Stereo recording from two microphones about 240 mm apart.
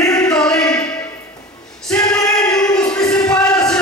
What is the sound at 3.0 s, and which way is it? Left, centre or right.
Music, centre.